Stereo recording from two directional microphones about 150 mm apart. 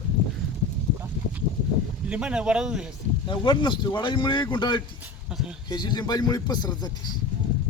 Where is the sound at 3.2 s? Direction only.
30° left (ahead or behind).